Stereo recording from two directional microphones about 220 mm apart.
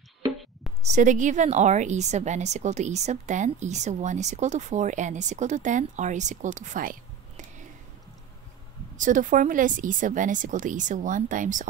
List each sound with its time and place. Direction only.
0.8 s a woman's voice: 35° right (ahead or behind)
8.9 s a woman's voice: 35° right (ahead or behind)